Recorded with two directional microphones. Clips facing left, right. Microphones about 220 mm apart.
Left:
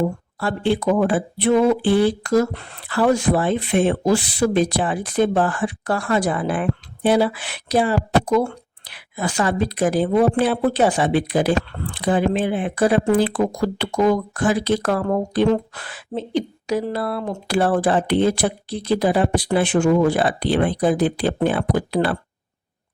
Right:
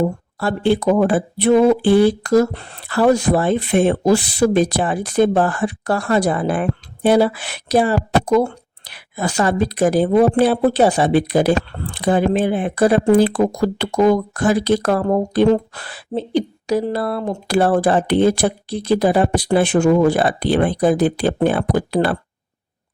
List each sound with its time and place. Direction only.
0.3 s speech: 40° right (ahead or behind)